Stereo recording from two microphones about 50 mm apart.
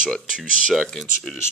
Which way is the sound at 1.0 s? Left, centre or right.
Centre.